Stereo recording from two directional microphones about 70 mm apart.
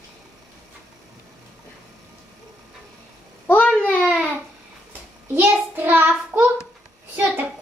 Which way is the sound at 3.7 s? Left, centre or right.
Centre.